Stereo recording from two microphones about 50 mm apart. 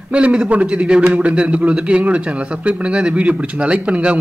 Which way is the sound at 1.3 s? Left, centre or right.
Right.